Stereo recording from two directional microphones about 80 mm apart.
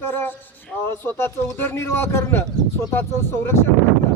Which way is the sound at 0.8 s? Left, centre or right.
Left.